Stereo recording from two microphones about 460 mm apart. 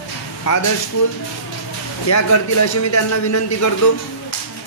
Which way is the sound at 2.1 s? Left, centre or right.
Left.